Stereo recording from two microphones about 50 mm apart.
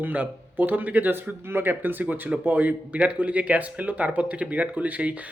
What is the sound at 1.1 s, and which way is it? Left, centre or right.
Speech, right.